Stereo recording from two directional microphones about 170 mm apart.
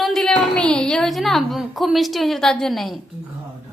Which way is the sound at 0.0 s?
Centre (ahead or behind).